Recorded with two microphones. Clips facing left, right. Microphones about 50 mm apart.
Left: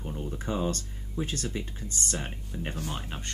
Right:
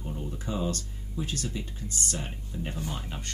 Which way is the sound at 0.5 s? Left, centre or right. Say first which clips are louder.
Left 1 dB; left.